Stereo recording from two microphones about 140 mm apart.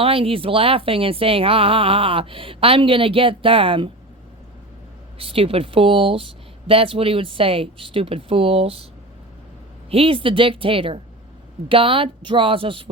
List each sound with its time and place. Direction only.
0.0 s speech: 40° right (ahead or behind)
5.1 s speech: 45° right (ahead or behind)
9.9 s speech: 40° right (ahead or behind)